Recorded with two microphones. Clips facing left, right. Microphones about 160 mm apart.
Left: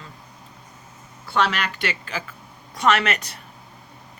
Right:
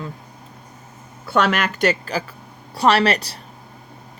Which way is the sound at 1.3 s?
50° right (ahead or behind).